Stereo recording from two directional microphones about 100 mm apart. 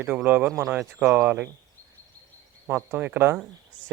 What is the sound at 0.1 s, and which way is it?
Speech, 15° right (ahead or behind).